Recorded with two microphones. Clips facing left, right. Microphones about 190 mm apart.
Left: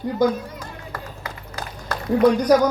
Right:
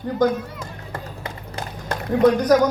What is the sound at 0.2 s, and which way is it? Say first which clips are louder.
Speech: even; 10° left (ahead or behind).